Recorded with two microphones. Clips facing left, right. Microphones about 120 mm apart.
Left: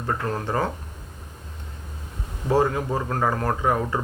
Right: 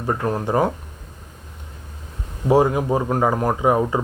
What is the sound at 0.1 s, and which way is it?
Speech, 15° right (ahead or behind).